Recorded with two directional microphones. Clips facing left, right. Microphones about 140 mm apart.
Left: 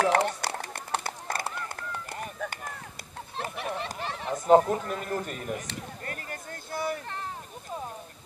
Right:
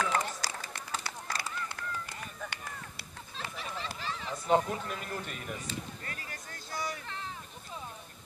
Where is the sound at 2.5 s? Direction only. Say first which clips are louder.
Left 4 dB; 45° left (ahead or behind).